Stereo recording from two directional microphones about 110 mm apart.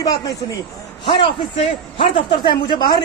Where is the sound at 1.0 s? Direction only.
45° left (ahead or behind).